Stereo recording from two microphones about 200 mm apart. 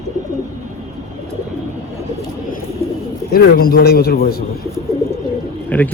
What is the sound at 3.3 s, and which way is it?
A man's voice, 50° left (ahead or behind).